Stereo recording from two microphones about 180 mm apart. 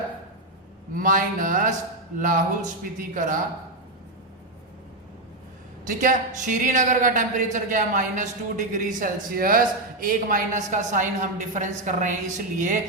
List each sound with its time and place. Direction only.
0.9 s a man's voice: 45° right (ahead or behind)
5.8 s a man's voice: 45° right (ahead or behind)